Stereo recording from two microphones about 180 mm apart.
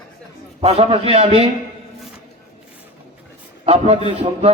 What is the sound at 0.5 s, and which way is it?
Speech, 35° right (ahead or behind).